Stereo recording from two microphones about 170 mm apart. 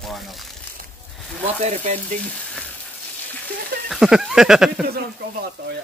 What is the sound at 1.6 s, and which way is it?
Frying, 40° right (ahead or behind).